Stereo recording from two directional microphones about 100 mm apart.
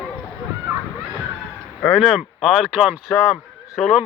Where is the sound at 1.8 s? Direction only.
Centre (ahead or behind).